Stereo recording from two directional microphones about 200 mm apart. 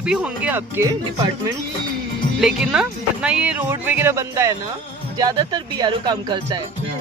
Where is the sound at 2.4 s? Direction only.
5° right (ahead or behind); by 6.6 s 20° right (ahead or behind).